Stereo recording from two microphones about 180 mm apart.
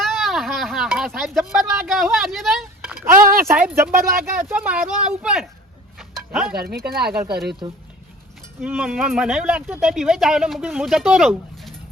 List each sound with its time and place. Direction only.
0.0 s speech: centre (ahead or behind)
3.0 s speech: 15° right (ahead or behind)
6.0 s a sound: 5° right (ahead or behind)
6.5 s speech: 60° right (ahead or behind)
8.6 s speech: 5° right (ahead or behind)